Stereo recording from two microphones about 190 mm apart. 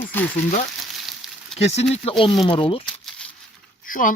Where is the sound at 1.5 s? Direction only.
35° left (ahead or behind).